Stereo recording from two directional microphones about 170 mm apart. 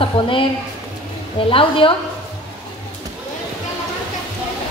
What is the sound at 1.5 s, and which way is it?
Speech, 30° left (ahead or behind).